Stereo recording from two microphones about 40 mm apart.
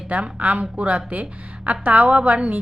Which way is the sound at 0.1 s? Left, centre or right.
Right.